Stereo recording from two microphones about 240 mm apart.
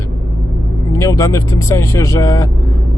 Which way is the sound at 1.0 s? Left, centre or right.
Centre.